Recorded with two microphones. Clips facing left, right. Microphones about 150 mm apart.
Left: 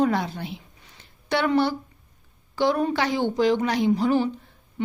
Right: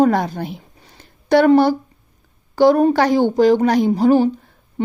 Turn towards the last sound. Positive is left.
turn(degrees=-40)  # may be behind; listen again after turning